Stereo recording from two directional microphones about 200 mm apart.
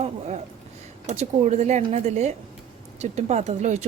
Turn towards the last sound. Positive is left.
turn(degrees=-35)  # may be behind; listen again after turning